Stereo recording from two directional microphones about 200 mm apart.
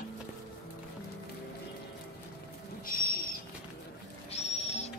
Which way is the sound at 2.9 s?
45° left (ahead or behind).